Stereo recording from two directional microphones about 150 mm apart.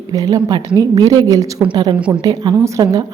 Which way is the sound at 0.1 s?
25° right (ahead or behind).